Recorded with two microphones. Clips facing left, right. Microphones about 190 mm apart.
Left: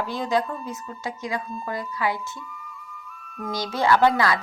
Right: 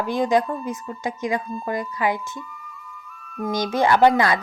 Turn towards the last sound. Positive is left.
turn(degrees=-20)  # may be behind; listen again after turning